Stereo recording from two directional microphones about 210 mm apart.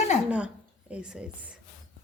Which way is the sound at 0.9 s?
5° right (ahead or behind).